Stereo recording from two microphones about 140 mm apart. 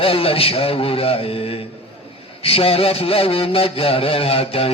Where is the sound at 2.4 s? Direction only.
45° left (ahead or behind).